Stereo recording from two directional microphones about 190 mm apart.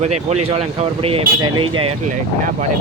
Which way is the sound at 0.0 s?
35° right (ahead or behind).